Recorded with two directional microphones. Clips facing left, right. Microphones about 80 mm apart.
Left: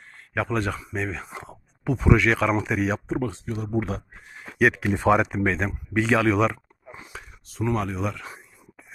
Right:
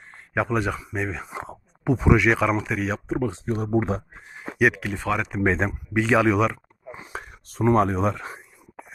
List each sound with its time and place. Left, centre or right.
0.4 s speech: centre
2.5 s speech: centre
3.4 s speech: right
3.8 s speech: right
4.5 s speech: centre
4.9 s speech: left
5.4 s speech: right
5.9 s speech: centre
7.1 s speech: right